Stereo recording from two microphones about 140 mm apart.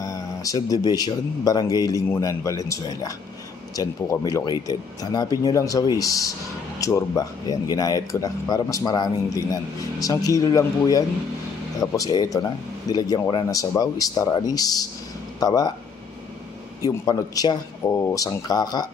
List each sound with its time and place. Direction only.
0.0 s speech: 25° left (ahead or behind)
16.8 s speech: 25° left (ahead or behind)